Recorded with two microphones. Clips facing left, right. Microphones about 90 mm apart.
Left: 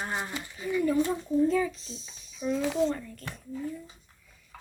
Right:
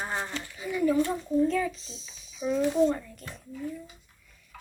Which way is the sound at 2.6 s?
90° left.